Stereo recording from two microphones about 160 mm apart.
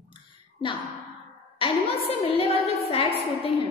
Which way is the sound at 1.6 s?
35° left (ahead or behind).